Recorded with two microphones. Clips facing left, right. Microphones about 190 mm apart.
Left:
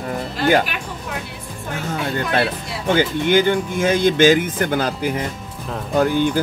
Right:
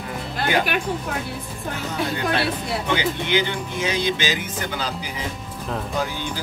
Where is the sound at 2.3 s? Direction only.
50° left (ahead or behind).